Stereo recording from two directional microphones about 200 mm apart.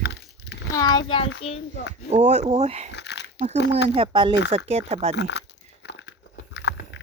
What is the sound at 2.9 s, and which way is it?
Biting, 60° left (ahead or behind).